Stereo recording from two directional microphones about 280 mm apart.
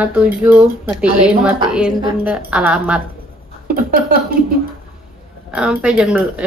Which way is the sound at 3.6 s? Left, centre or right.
Right.